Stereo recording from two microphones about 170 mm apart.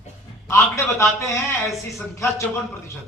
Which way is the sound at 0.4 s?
15° left (ahead or behind).